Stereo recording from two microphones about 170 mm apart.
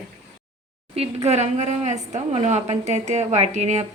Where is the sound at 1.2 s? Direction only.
40° right (ahead or behind).